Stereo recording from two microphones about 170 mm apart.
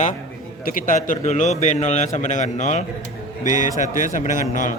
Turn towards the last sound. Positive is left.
turn(degrees=50)  # may be behind; listen again after turning